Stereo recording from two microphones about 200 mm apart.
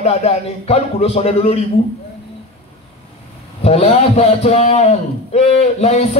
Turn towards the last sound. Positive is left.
turn(degrees=30)  # may be behind; listen again after turning